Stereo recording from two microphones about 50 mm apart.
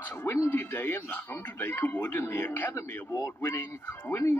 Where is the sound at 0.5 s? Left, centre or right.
Left.